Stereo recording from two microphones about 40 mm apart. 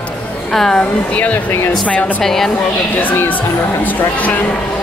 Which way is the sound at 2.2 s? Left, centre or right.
Centre.